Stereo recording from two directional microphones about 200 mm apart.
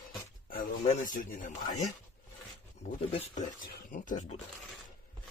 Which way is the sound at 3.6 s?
40° left (ahead or behind).